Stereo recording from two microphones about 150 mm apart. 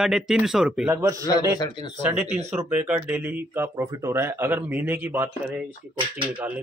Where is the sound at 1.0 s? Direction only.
20° right (ahead or behind).